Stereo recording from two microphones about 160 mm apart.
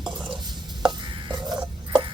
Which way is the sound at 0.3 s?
30° right (ahead or behind).